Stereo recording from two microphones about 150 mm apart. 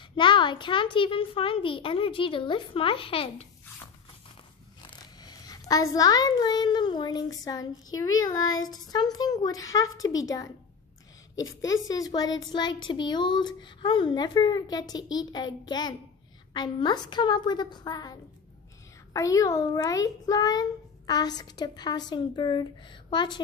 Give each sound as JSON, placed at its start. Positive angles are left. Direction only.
{"t": 0.1, "sound": "a child's voice", "side_deg": 35}
{"t": 4.8, "sound": "a child's voice", "side_deg": 25}
{"t": 19.1, "sound": "a child's voice", "side_deg": 20}